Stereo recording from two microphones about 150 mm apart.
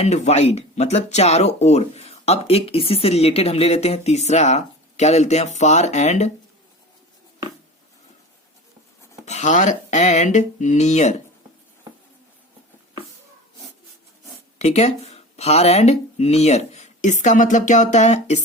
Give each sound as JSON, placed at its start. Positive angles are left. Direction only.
{"t": 0.0, "sound": "speech", "side_deg": 45}
{"t": 9.2, "sound": "speech", "side_deg": 50}
{"t": 14.6, "sound": "speech", "side_deg": 45}
{"t": 17.2, "sound": "a sound", "side_deg": 60}